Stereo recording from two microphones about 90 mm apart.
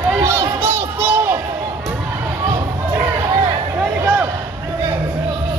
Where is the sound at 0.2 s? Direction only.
30° right (ahead or behind).